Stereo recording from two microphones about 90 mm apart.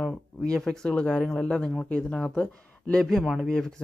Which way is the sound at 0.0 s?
Centre (ahead or behind).